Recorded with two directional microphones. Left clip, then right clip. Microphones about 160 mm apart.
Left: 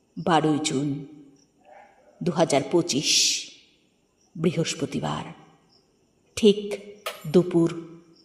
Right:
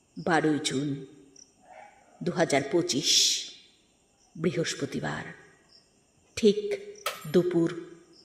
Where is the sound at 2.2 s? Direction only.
20° left (ahead or behind).